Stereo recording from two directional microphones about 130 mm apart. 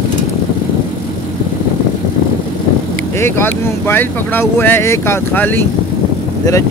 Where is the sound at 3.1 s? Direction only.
20° left (ahead or behind).